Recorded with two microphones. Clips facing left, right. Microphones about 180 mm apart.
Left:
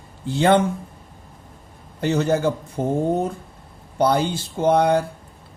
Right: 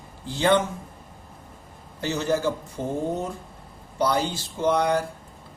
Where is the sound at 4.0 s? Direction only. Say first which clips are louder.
Left 5 dB; 55° left (ahead or behind).